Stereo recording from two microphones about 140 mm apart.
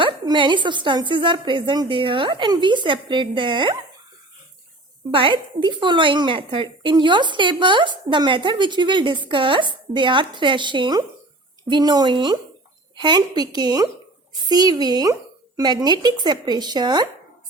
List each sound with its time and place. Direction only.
0.0 s a woman's voice: 35° right (ahead or behind)
5.1 s a woman's voice: 35° right (ahead or behind)